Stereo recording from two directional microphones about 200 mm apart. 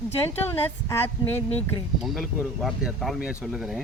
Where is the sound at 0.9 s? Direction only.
10° left (ahead or behind).